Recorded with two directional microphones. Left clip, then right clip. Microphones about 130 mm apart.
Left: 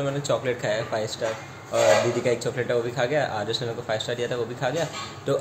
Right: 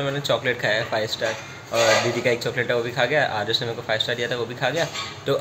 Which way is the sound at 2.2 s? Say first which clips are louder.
Right 3 dB; centre (ahead or behind).